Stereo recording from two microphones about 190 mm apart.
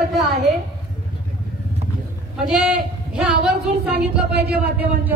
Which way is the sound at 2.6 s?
5° right (ahead or behind).